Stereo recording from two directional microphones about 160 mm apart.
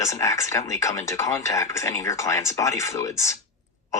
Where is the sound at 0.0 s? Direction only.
20° left (ahead or behind).